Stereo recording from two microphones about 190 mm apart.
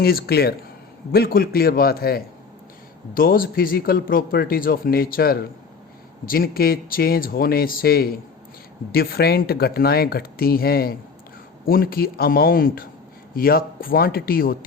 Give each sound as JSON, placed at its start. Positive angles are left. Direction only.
{"t": 0.0, "sound": "a man's voice", "side_deg": 55}